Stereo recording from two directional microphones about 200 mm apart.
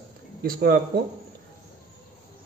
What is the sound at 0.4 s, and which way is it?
Speech, 45° right (ahead or behind).